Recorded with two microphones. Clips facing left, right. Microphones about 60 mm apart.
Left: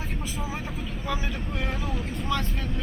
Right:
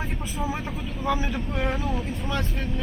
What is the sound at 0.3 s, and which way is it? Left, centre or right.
Speech, centre.